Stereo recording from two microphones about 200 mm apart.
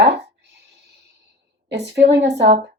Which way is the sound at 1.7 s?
55° right (ahead or behind).